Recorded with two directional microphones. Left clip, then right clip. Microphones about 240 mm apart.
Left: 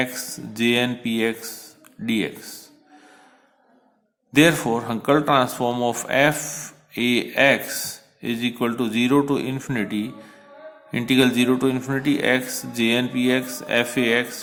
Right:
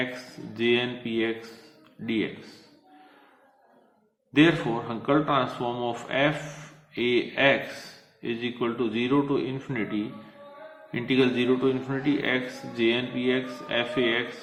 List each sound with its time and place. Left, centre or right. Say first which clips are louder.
0.5 s speech: left 4 dB; left
4.3 s speech: left 5 dB; left